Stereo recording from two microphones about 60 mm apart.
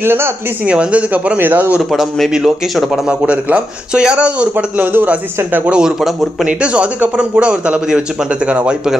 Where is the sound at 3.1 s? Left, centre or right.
Right.